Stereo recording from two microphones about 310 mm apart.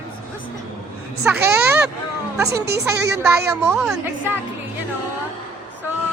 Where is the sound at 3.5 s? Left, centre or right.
Centre.